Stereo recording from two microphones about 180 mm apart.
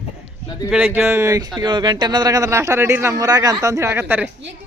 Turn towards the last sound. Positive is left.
turn(degrees=-10)  # may be behind; listen again after turning